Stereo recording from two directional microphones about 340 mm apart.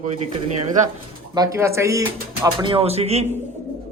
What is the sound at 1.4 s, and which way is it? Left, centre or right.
Speech, centre.